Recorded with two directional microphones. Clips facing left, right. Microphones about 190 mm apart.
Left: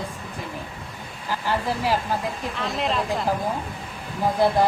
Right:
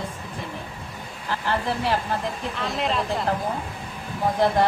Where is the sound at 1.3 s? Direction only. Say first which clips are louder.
Even; 10° left (ahead or behind).